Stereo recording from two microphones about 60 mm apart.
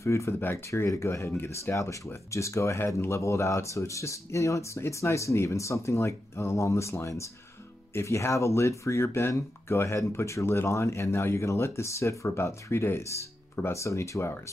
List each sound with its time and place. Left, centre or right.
0.0 s speech: left
0.3 s speech: left
0.8 s speech: left